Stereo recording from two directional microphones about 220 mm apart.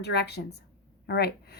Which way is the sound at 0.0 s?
50° left (ahead or behind).